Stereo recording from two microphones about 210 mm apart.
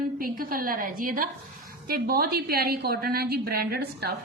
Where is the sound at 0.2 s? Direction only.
45° right (ahead or behind).